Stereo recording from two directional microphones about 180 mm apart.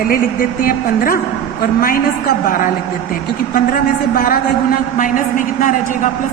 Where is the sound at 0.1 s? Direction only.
50° left (ahead or behind).